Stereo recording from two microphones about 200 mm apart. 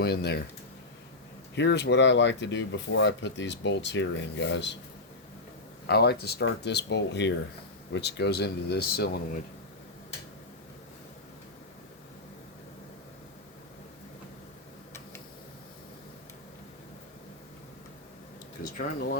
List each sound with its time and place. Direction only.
0.0 s speech: 55° left (ahead or behind)
1.5 s speech: 60° left (ahead or behind)
5.9 s speech: 55° left (ahead or behind)
18.6 s speech: 40° left (ahead or behind)